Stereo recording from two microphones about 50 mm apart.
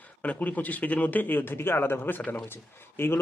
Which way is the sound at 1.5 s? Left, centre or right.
Left.